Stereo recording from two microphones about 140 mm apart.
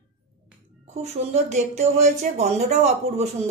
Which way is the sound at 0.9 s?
50° right (ahead or behind).